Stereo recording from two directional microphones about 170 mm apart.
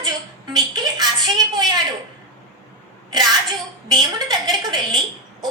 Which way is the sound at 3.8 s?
25° right (ahead or behind).